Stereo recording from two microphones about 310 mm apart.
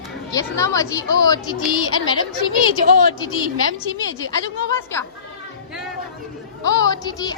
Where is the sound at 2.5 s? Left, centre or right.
Right.